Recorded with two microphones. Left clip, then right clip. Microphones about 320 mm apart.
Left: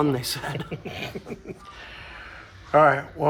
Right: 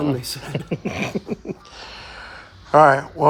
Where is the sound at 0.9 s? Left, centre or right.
Centre.